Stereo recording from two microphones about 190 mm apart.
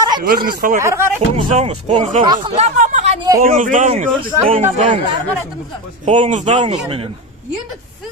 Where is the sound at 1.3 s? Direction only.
35° right (ahead or behind).